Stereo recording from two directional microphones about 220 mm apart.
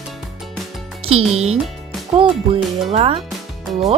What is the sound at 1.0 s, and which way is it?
Speech, 25° right (ahead or behind).